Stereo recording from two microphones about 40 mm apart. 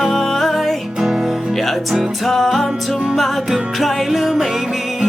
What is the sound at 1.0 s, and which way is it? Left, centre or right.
Music, centre.